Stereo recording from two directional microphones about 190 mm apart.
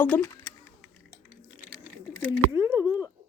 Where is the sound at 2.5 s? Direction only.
15° right (ahead or behind).